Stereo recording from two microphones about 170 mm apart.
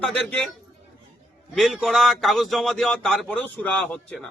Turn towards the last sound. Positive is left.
turn(degrees=5)  # may be behind; listen again after turning